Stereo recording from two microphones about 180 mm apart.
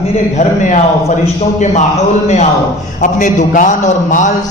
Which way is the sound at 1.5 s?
40° left (ahead or behind).